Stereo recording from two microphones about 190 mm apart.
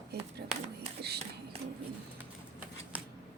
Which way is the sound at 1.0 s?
60° right (ahead or behind).